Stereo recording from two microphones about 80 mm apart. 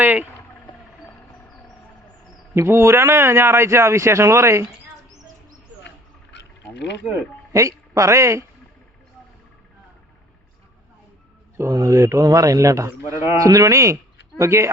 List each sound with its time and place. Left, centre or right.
0.0 s speech: right
2.6 s a man's voice: right
7.5 s speech: right
11.5 s a man's voice: right